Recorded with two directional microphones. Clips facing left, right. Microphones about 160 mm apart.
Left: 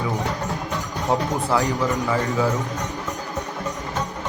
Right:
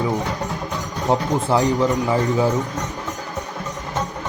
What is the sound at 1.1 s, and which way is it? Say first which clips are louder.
Speech: right 3 dB; 30° right (ahead or behind).